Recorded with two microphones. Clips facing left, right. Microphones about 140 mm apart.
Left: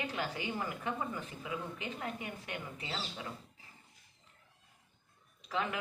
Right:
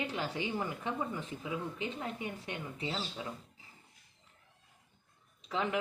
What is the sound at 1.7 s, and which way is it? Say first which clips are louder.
Speech: right 2 dB; 25° right (ahead or behind).